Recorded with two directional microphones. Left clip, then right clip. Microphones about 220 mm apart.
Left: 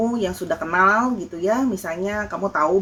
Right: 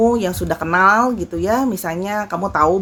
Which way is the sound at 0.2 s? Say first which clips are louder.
Right 3 dB; 45° right (ahead or behind).